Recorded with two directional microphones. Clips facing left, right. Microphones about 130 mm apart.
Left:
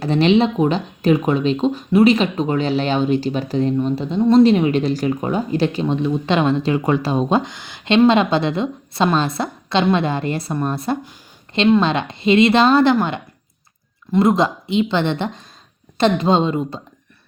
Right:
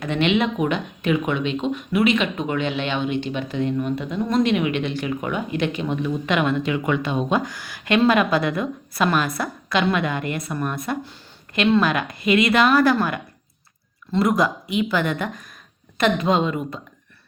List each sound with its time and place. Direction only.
0.0 s a woman's voice: 35° left (ahead or behind)